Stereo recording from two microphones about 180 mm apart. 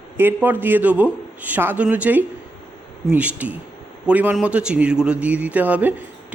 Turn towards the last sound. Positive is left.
turn(degrees=-10)  # may be behind; listen again after turning